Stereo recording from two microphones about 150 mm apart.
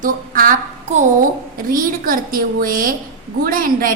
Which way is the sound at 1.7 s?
70° right (ahead or behind).